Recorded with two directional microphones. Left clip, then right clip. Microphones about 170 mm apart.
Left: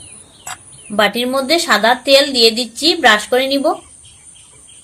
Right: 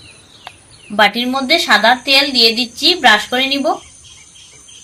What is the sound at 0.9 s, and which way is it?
A woman's voice, 45° left (ahead or behind).